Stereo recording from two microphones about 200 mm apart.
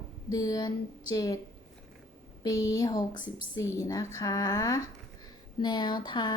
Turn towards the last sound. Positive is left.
turn(degrees=20)  # may be behind; listen again after turning